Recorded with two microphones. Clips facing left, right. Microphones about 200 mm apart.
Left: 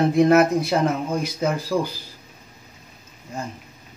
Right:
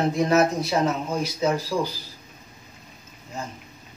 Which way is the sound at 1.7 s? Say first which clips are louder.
Left 3 dB; 90° left.